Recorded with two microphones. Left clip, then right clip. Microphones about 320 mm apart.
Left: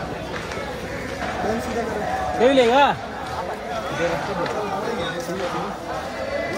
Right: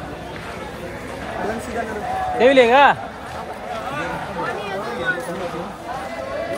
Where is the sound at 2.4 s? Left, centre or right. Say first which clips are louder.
Right 4 dB; right.